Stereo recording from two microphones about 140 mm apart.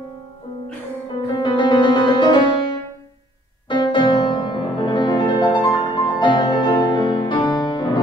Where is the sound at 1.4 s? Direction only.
35° left (ahead or behind).